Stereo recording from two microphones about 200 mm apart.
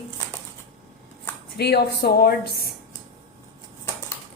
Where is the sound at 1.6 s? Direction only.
55° left (ahead or behind).